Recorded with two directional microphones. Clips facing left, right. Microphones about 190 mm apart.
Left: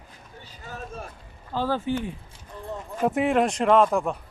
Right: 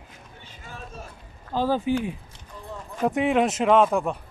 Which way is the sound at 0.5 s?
45° left (ahead or behind).